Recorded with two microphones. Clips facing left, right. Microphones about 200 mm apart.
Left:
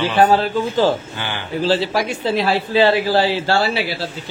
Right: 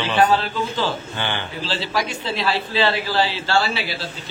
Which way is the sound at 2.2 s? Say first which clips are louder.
Left 5 dB; 50° left (ahead or behind).